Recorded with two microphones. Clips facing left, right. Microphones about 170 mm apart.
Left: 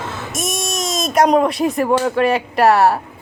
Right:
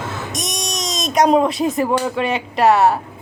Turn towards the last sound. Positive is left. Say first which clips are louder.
# left 1 dB
turn(degrees=0)  # may be behind; listen again after turning